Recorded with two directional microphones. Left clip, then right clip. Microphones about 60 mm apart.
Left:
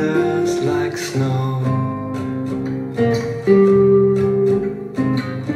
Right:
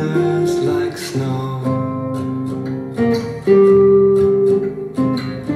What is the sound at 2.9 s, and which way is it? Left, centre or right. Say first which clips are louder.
Music: even; right.